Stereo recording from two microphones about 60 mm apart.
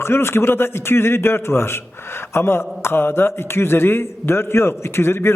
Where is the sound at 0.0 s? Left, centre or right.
Left.